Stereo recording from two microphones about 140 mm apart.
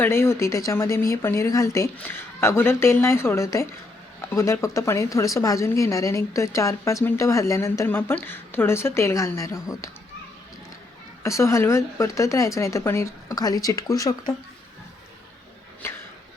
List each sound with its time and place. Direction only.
0.0 s a woman's voice: 15° left (ahead or behind)
11.2 s a woman's voice: 20° left (ahead or behind)
15.8 s a sound: 15° left (ahead or behind)